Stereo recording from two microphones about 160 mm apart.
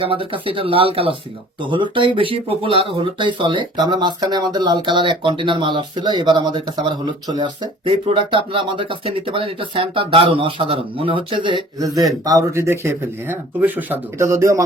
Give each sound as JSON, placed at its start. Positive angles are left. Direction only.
{"t": 0.0, "sound": "speech", "side_deg": -35}